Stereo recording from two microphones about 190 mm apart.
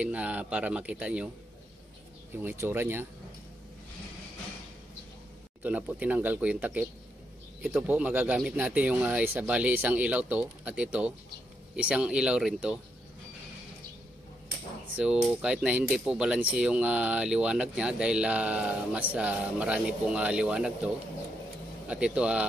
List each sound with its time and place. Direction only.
0.0 s speech: 5° right (ahead or behind)
2.3 s speech: 10° right (ahead or behind)
5.6 s speech: 10° right (ahead or behind)
15.4 s speech: 5° right (ahead or behind)